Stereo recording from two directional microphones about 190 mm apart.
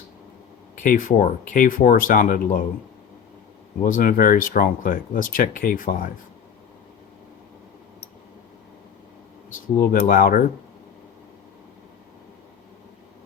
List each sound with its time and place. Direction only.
0.8 s speech: 45° left (ahead or behind)
3.8 s speech: 45° left (ahead or behind)
9.8 s speech: 50° left (ahead or behind)